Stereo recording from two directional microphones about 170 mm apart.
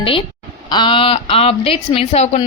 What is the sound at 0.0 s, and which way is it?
A woman's voice, 30° left (ahead or behind).